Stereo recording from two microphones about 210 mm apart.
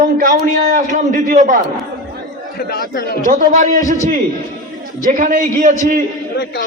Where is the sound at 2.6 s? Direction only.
45° left (ahead or behind).